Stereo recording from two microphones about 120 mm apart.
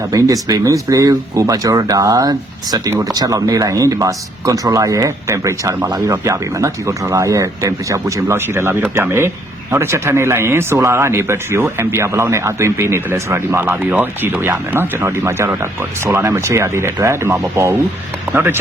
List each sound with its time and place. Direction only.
0.1 s speech: 30° right (ahead or behind)